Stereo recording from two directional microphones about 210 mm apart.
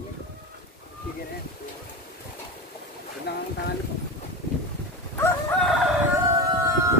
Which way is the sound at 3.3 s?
55° left (ahead or behind).